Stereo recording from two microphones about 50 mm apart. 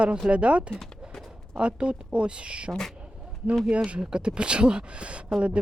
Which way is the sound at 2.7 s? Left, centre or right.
Centre.